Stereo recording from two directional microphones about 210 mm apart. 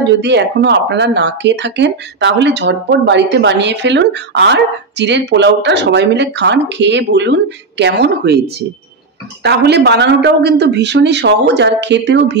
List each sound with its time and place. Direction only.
0.0 s speech: 55° right (ahead or behind)
9.4 s speech: 50° right (ahead or behind)